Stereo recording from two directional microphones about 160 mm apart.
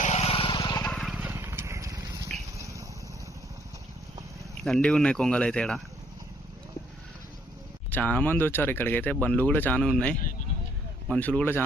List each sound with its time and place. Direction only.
0.0 s vehicle: 40° left (ahead or behind)
0.9 s horse: centre (ahead or behind); by 2.0 s 20° right (ahead or behind)
2.6 s a sound: 20° right (ahead or behind)
4.6 s speech: 5° left (ahead or behind)
7.9 s speech: 10° left (ahead or behind)